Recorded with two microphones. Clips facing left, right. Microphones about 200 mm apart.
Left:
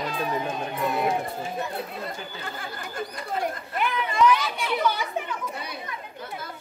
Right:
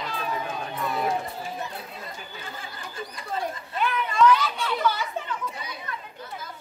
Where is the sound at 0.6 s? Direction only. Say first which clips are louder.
Left 3 dB; 15° left (ahead or behind).